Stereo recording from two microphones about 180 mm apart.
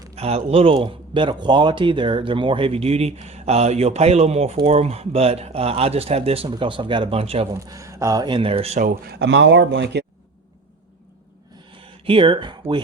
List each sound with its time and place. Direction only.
0.2 s speech: 35° right (ahead or behind)
7.5 s speech: 15° right (ahead or behind); by 8.9 s 35° right (ahead or behind)
9.0 s speech: 70° right (ahead or behind)
11.7 s a sound: 30° right (ahead or behind)